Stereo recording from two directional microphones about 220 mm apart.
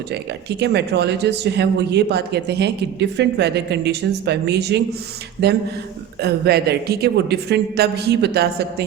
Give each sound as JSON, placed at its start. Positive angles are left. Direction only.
{"t": 0.1, "sound": "a man's voice", "side_deg": -50}
{"t": 6.1, "sound": "a man's voice", "side_deg": -50}